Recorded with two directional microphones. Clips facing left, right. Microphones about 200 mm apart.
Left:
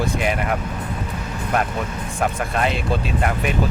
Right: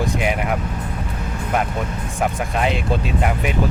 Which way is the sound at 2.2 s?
10° right (ahead or behind).